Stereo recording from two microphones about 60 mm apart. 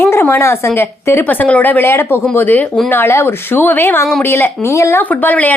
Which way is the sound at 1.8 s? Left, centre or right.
Left.